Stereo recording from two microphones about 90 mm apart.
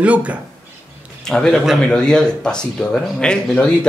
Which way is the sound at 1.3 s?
5° left (ahead or behind).